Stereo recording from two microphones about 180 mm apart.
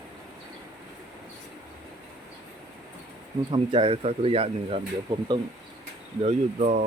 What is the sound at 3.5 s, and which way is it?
Speech, 30° right (ahead or behind).